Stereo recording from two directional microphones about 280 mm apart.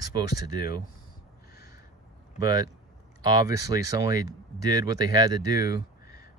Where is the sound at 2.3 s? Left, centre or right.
Centre.